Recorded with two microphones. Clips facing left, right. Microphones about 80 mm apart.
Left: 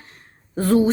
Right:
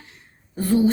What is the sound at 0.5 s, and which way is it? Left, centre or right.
Speech, left.